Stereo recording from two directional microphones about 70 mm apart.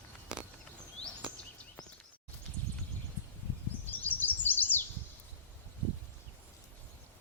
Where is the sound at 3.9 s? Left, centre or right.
Left.